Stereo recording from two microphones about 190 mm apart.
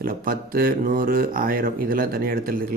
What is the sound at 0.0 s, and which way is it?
Speech, 50° right (ahead or behind).